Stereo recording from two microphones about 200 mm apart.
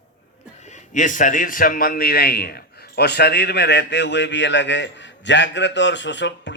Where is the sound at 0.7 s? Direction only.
40° left (ahead or behind).